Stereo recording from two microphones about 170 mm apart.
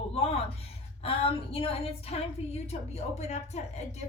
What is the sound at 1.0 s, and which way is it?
A woman's voice, 35° left (ahead or behind).